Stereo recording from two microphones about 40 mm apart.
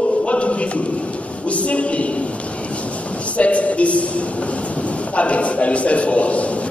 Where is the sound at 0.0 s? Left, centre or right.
Left.